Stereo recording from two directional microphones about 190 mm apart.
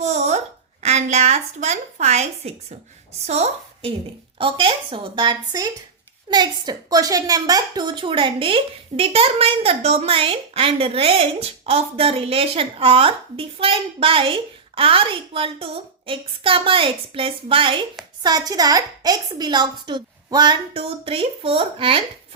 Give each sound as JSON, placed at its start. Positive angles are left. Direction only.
{"t": 0.0, "sound": "a child's voice", "side_deg": -35}